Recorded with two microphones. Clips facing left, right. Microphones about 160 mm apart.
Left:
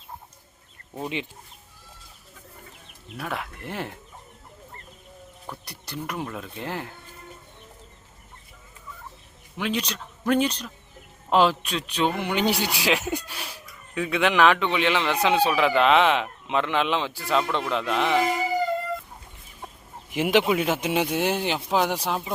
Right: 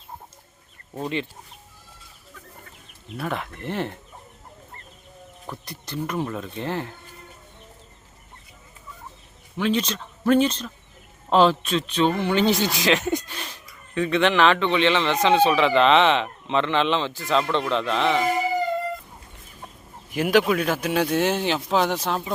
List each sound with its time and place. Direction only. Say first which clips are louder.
0.9 s a man's voice: right 3 dB; 15° left (ahead or behind)
3.2 s a man's voice: right 3 dB; centre (ahead or behind)
5.6 s a man's voice: right 5 dB; 10° left (ahead or behind)
9.6 s a man's voice: right 5 dB; 10° left (ahead or behind)
20.1 s a man's voice: right 1 dB; 20° left (ahead or behind)